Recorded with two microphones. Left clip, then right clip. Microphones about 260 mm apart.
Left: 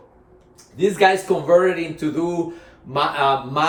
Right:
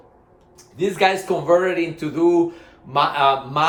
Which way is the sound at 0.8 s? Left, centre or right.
Centre.